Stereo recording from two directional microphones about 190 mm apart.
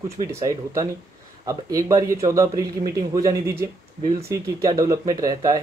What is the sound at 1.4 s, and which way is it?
Speech, 20° right (ahead or behind).